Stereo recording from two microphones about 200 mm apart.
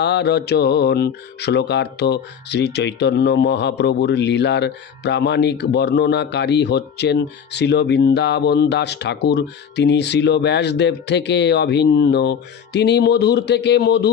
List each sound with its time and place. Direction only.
0.0 s mantra: 60° left (ahead or behind)